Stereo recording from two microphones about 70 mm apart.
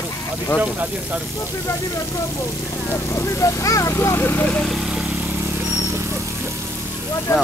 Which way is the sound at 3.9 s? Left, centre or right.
Left.